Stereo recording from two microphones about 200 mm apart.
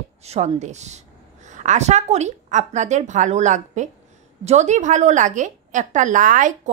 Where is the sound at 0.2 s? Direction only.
30° right (ahead or behind).